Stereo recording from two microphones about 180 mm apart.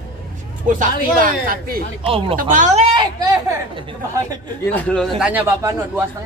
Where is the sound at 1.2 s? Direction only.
55° right (ahead or behind).